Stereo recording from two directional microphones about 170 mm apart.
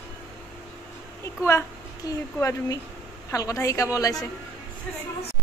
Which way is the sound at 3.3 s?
20° left (ahead or behind).